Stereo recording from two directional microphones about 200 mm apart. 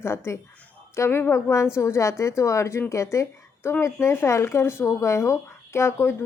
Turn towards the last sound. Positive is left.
turn(degrees=15)  # may be behind; listen again after turning